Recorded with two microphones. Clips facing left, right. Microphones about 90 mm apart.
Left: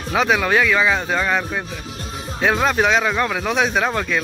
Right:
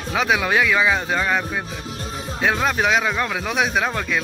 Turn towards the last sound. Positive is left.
turn(degrees=0)  # may be behind; listen again after turning